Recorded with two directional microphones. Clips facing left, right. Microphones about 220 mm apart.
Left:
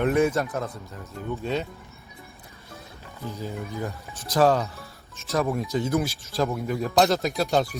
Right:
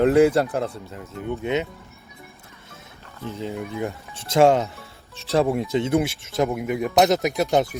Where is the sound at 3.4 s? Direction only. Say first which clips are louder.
Right 5 dB; 25° right (ahead or behind).